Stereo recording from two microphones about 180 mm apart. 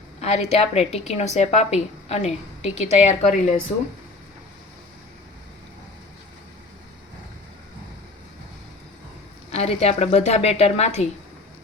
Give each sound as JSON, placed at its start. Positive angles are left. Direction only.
{"t": 0.2, "sound": "a woman's voice", "side_deg": 40}
{"t": 9.5, "sound": "a woman's voice", "side_deg": 35}